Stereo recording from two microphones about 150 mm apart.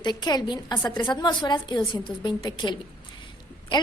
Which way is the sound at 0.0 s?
30° left (ahead or behind).